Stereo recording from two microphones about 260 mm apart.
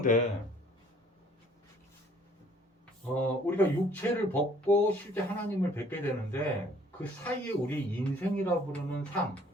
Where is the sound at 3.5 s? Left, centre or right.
Centre.